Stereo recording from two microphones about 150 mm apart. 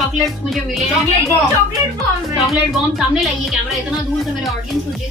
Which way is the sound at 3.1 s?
Centre (ahead or behind).